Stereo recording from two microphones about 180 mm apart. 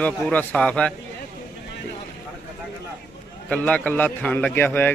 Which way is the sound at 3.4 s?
5° left (ahead or behind).